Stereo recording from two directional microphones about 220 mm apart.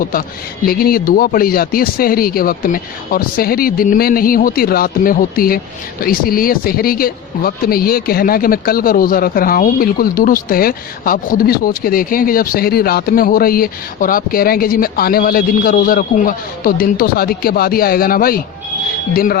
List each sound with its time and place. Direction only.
0.0 s speech: 40° left (ahead or behind)